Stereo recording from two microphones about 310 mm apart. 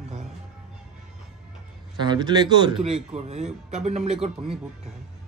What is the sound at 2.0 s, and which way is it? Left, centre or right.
Speech, centre.